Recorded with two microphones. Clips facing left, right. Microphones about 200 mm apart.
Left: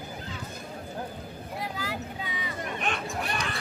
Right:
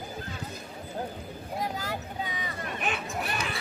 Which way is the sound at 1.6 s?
45° right (ahead or behind).